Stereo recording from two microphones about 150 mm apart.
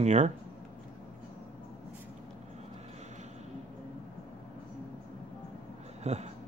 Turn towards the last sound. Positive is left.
turn(degrees=-45)  # may be behind; listen again after turning